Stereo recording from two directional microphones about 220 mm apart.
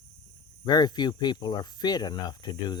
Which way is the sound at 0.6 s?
20° left (ahead or behind).